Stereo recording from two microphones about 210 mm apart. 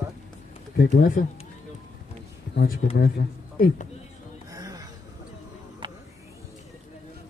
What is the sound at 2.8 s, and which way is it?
Speech, 55° left (ahead or behind).